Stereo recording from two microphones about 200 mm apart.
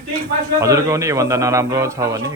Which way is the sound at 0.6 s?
15° right (ahead or behind).